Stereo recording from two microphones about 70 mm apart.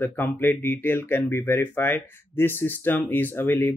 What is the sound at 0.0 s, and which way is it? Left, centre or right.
Speech, left.